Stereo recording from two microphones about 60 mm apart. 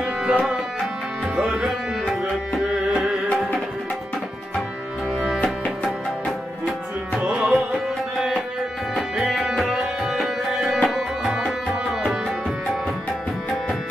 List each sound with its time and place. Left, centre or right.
0.0 s tabla: centre
1.3 s speech: centre
7.2 s tabla: centre
8.9 s music: centre